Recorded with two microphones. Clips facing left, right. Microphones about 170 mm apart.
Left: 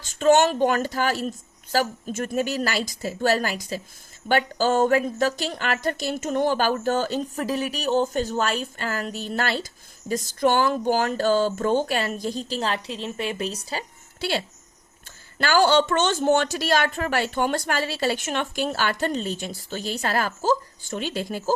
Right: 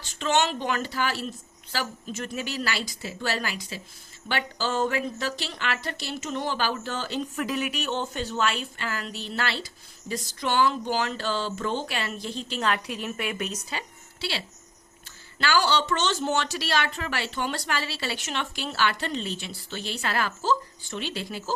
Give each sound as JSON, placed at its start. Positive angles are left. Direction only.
{"t": 0.0, "sound": "speech", "side_deg": 45}
{"t": 14.2, "sound": "speech", "side_deg": 50}